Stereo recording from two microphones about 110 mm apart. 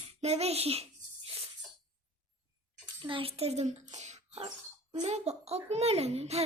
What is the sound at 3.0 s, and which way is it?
A child's voice, 55° right (ahead or behind).